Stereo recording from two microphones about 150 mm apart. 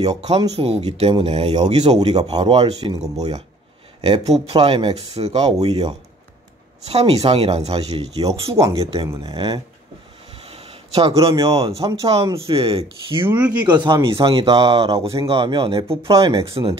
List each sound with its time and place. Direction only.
0.0 s speech: 30° right (ahead or behind)
2.0 s speech: 45° right (ahead or behind)
2.3 s speech: 30° right (ahead or behind)
4.0 s speech: 40° right (ahead or behind)
8.5 s speech: 20° right (ahead or behind)
10.5 s a sound: 40° right (ahead or behind)
11.6 s speech: 30° right (ahead or behind)
13.3 s speech: 10° right (ahead or behind)
13.7 s speech: 30° right (ahead or behind)